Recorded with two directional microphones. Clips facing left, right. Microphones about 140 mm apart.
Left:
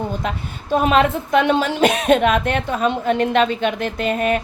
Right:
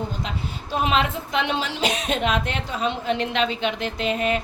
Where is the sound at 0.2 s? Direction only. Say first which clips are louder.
Left 4 dB; 50° left (ahead or behind).